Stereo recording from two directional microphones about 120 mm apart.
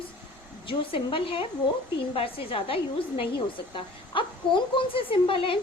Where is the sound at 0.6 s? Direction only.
45° left (ahead or behind).